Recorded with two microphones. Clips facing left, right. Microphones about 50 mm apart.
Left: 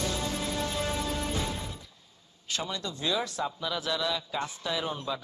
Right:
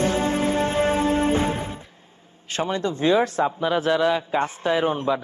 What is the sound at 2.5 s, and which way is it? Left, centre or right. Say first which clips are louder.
A man's voice: right 10 dB; right.